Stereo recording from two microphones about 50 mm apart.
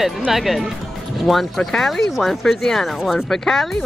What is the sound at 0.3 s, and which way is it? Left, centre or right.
Speech, centre.